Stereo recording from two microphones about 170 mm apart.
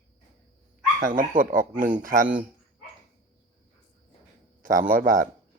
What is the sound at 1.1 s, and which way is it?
Speech, 55° right (ahead or behind).